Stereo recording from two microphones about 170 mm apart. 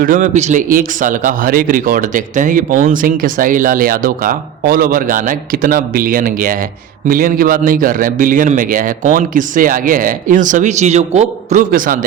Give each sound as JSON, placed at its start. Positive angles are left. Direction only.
{"t": 0.0, "sound": "a man's voice", "side_deg": -50}